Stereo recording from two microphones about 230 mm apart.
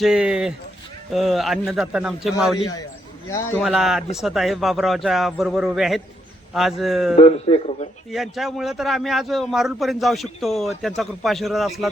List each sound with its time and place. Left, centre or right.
0.0 s a man's voice: centre
3.6 s a man's voice: centre
7.2 s speech: left
8.1 s a man's voice: centre